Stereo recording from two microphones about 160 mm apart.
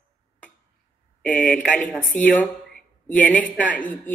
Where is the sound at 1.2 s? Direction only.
10° left (ahead or behind).